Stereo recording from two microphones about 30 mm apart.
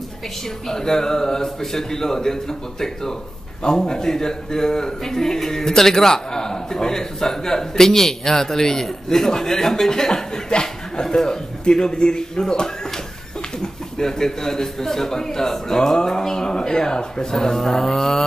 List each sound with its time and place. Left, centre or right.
0.7 s a man's voice: centre